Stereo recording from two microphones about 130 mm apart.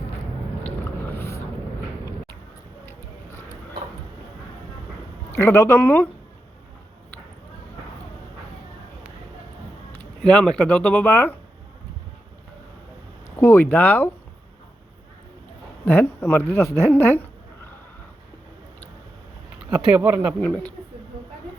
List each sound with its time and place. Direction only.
0.6 s a sound: 15° left (ahead or behind)
5.4 s speech: 20° left (ahead or behind)
10.2 s speech: 5° left (ahead or behind)
13.3 s speech: 20° left (ahead or behind)
15.9 s speech: 15° left (ahead or behind)
19.7 s speech: 15° right (ahead or behind)
20.4 s speech: 10° left (ahead or behind)